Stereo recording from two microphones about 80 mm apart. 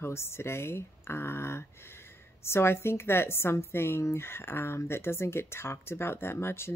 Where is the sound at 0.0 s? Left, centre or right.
Left.